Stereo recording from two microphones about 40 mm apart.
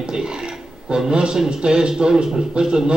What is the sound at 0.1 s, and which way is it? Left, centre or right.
A man's voice, centre.